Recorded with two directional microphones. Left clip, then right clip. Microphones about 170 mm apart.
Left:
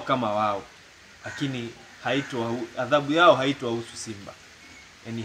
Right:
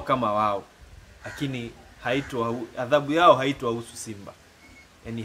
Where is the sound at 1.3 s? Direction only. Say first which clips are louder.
Left 1 dB; 55° right (ahead or behind).